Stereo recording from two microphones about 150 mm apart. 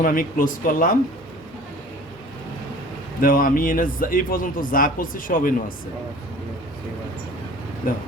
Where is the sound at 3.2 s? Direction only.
70° left (ahead or behind).